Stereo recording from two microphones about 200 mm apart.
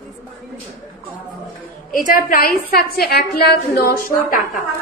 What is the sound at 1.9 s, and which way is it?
A woman's voice, 45° left (ahead or behind).